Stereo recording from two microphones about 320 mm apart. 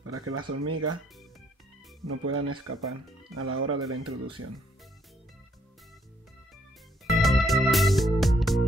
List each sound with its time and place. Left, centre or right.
0.0 s speech: right
2.0 s speech: right
7.1 s music: centre